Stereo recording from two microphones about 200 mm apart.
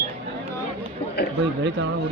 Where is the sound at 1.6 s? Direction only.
65° right (ahead or behind).